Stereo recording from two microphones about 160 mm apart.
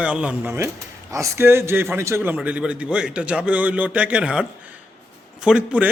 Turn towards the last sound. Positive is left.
turn(degrees=-5)  # may be behind; listen again after turning